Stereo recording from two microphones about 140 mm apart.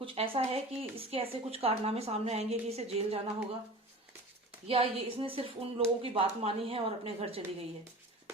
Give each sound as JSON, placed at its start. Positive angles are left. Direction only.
{"t": 0.0, "sound": "speech", "side_deg": -40}
{"t": 4.6, "sound": "speech", "side_deg": -45}